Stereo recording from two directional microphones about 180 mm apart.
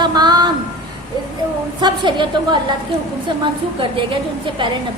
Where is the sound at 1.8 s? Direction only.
25° right (ahead or behind).